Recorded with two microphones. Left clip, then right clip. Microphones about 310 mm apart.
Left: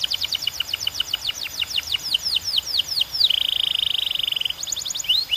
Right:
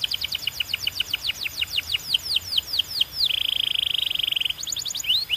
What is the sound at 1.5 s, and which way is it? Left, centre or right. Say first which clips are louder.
Bird: left 2 dB; centre.